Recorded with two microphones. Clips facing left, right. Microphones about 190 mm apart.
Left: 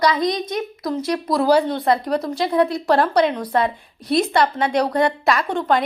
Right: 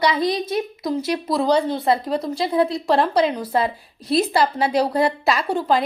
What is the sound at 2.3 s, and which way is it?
Speech, 30° right (ahead or behind).